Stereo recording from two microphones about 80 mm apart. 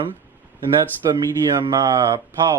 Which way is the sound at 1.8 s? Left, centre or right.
Right.